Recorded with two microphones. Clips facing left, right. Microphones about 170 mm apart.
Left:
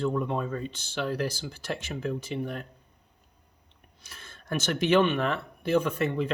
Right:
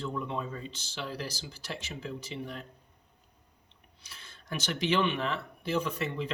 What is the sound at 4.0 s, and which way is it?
Speech, 50° left (ahead or behind).